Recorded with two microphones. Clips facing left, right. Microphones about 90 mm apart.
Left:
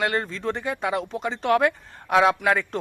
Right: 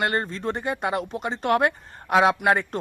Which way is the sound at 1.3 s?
45° right (ahead or behind).